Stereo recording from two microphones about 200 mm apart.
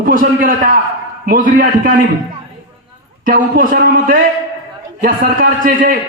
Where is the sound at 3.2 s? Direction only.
45° right (ahead or behind).